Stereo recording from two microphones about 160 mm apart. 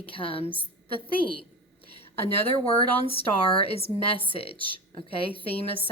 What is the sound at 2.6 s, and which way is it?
A woman's voice, 35° left (ahead or behind).